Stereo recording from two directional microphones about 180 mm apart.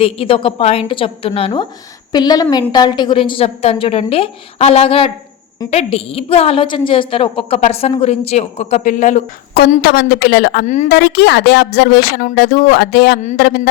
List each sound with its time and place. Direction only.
0.0 s a woman's voice: 30° left (ahead or behind)
9.6 s a woman's voice: 60° left (ahead or behind)